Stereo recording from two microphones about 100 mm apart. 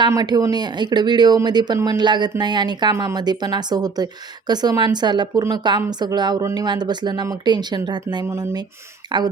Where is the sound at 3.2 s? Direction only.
45° right (ahead or behind).